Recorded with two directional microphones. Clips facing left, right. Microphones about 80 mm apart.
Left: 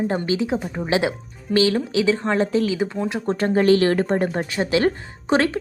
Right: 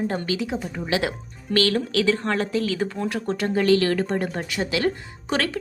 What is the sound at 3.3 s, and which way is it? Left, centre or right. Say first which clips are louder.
Speech: left 3 dB; left.